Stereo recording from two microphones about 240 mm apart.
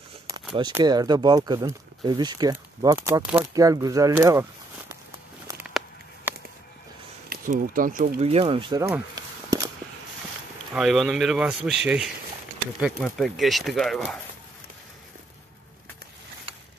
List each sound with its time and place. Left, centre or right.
0.6 s speech: centre
5.5 s a sound: centre
7.2 s speech: right; by 9.7 s centre
10.7 s speech: centre